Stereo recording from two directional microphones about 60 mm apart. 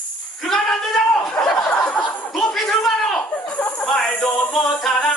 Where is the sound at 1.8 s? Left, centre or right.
Left.